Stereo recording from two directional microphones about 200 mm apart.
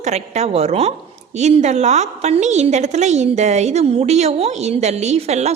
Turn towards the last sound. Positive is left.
turn(degrees=-35)  # may be behind; listen again after turning